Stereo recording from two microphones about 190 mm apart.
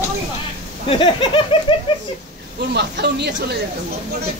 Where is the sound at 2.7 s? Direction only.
60° right (ahead or behind).